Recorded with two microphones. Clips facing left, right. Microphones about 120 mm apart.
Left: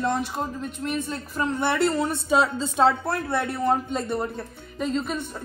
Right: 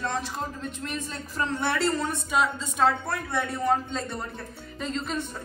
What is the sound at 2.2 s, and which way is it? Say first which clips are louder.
Speech: left 4 dB; 30° left (ahead or behind).